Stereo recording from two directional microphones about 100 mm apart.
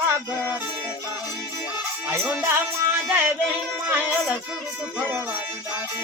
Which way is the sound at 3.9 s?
20° right (ahead or behind).